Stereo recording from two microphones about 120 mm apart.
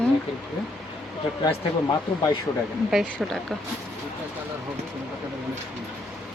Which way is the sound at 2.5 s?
35° left (ahead or behind).